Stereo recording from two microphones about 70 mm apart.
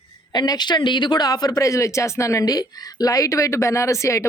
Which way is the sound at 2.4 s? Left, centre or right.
Left.